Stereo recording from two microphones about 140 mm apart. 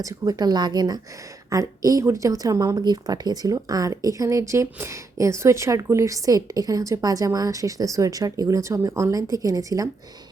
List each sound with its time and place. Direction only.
0.0 s a woman's voice: 25° right (ahead or behind)